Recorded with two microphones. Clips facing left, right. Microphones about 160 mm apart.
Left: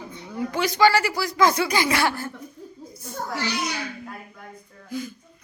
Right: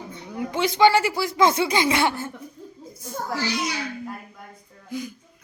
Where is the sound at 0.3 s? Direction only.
20° right (ahead or behind).